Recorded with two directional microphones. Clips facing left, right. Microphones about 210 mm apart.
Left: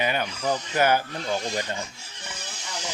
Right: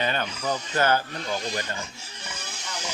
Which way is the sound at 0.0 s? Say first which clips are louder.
Left 1 dB; 10° left (ahead or behind).